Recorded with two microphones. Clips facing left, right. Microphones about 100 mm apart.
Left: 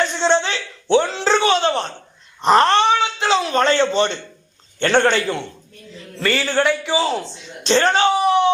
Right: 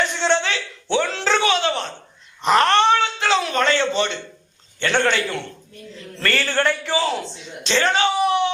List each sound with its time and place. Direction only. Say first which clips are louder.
0.2 s a sound: left 3 dB; 25° left (ahead or behind)
2.4 s cat: left 3 dB; 30° left (ahead or behind)
2.7 s a sound: even; 15° left (ahead or behind); by 4.2 s 35° left (ahead or behind)
4.8 s speech: left 4 dB; 35° left (ahead or behind)
6.1 s a man's voice: left 3 dB; 10° left (ahead or behind)
7.6 s speech: left 4 dB; 40° left (ahead or behind)